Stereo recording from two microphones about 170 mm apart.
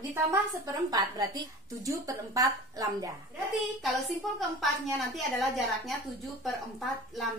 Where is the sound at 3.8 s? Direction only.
Centre (ahead or behind).